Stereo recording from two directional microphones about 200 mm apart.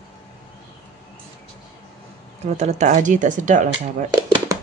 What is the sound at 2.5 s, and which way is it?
Speech, 35° right (ahead or behind).